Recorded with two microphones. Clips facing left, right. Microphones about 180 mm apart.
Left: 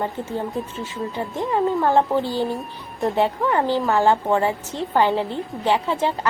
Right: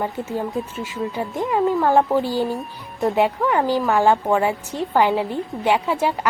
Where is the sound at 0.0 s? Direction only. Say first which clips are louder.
Right 1 dB; 10° right (ahead or behind).